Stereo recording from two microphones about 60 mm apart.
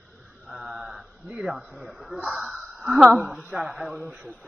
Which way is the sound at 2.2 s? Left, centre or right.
Centre.